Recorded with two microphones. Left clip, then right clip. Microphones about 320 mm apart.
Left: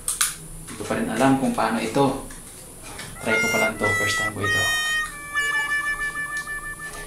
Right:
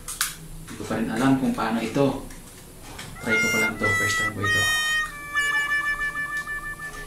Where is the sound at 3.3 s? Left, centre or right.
Centre.